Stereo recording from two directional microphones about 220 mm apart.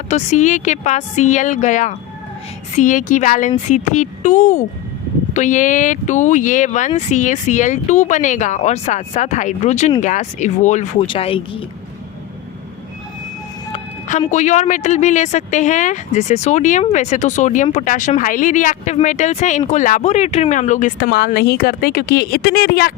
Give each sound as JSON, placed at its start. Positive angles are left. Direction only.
{"t": 0.1, "sound": "speech", "side_deg": 35}
{"t": 13.7, "sound": "speech", "side_deg": 30}